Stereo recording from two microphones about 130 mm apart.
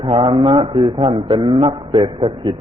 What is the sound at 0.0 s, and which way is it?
A man's voice, 40° right (ahead or behind).